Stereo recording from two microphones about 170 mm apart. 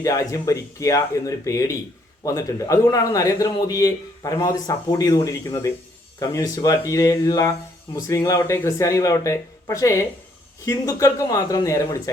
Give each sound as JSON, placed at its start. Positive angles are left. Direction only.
{"t": 0.0, "sound": "a man's voice", "side_deg": 20}